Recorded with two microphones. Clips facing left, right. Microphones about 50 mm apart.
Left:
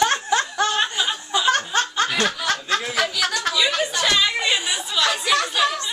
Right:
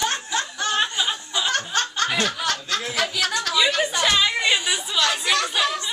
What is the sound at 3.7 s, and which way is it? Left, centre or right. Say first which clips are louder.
Speech: even; centre.